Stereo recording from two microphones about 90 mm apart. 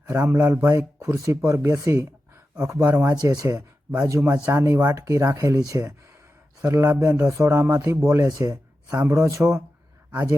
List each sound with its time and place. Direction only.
0.1 s speech: 30° right (ahead or behind)